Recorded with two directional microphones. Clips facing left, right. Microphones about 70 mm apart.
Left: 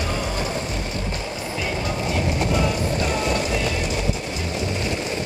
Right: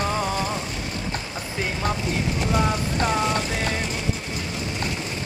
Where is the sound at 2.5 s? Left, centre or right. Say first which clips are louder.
Left 1 dB; right.